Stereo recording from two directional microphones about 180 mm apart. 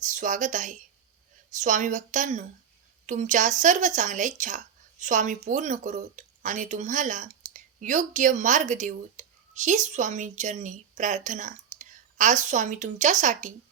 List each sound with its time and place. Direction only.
0.0 s a woman's voice: 45° right (ahead or behind)